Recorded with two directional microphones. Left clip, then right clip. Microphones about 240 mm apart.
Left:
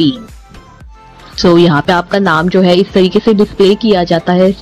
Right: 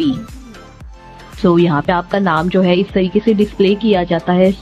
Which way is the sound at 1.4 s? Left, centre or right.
Left.